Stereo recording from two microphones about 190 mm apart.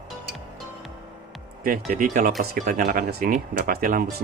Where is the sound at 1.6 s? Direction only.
50° right (ahead or behind).